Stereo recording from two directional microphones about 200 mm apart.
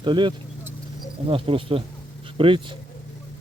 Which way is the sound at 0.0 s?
25° right (ahead or behind).